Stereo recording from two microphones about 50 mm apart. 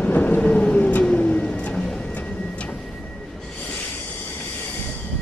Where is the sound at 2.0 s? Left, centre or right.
Left.